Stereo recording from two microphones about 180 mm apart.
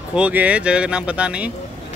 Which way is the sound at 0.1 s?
10° right (ahead or behind).